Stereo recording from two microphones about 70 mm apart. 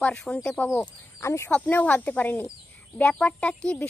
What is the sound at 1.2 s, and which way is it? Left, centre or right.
Speech, left.